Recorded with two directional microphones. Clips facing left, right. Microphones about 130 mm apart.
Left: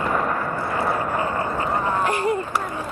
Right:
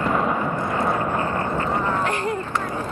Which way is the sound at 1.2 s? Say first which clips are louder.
Even; 15° left (ahead or behind).